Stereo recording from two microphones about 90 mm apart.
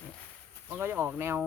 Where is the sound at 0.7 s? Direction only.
25° right (ahead or behind).